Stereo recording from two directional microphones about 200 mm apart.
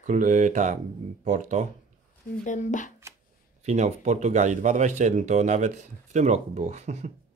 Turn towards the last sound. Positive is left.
turn(degrees=-35)  # may be behind; listen again after turning